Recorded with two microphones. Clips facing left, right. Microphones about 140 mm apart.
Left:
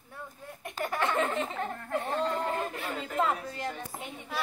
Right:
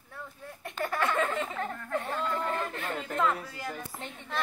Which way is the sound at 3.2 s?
30° left (ahead or behind).